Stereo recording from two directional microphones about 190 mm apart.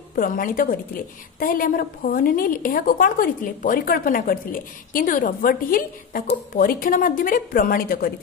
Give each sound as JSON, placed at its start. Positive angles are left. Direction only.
{"t": 0.1, "sound": "a woman's voice", "side_deg": 45}